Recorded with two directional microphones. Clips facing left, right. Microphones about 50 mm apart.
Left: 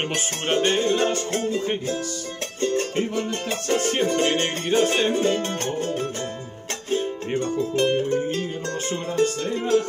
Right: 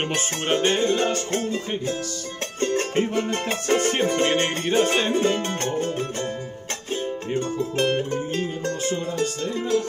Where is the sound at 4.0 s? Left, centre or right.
Centre.